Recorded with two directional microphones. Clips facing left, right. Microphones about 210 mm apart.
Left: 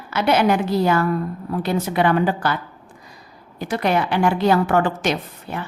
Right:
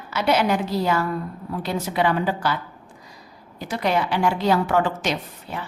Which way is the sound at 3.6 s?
55° left (ahead or behind).